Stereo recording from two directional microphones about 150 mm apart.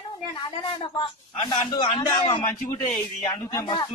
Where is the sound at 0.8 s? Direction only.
30° left (ahead or behind).